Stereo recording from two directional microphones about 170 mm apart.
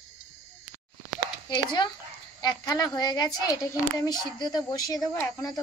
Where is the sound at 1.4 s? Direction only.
25° left (ahead or behind).